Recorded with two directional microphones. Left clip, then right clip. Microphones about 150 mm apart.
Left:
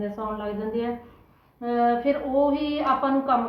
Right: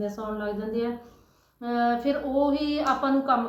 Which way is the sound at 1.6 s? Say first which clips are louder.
Left 3 dB; 10° right (ahead or behind).